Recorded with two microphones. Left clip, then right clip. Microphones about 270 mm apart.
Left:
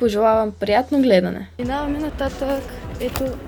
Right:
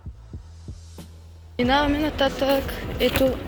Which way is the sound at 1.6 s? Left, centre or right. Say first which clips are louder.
Right 4 dB; centre.